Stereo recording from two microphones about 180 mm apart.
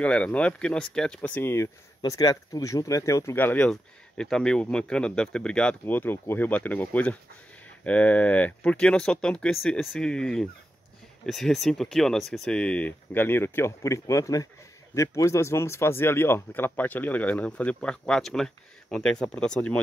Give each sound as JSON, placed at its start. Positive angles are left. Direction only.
{"t": 0.0, "sound": "speech", "side_deg": 5}